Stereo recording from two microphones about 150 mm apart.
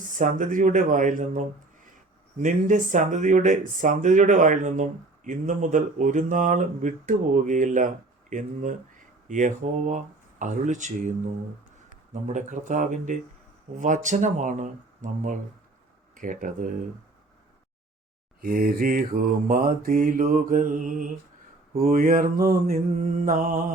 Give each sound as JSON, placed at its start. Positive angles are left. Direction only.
{"t": 0.0, "sound": "speech", "side_deg": -60}
{"t": 12.3, "sound": "speech", "side_deg": -55}
{"t": 18.3, "sound": "speech", "side_deg": -80}